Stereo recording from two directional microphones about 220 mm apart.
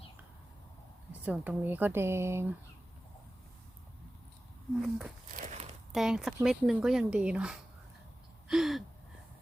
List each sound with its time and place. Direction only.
1.2 s speech: 5° right (ahead or behind)
5.3 s a sound: 35° right (ahead or behind)
5.9 s speech: centre (ahead or behind)